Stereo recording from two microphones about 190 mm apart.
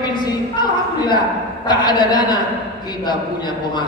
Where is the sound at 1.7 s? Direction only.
25° left (ahead or behind).